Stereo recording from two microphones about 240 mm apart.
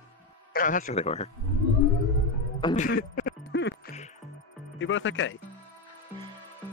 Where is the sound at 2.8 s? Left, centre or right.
Left.